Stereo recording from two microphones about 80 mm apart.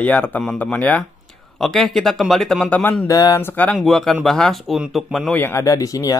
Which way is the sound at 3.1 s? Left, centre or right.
Left.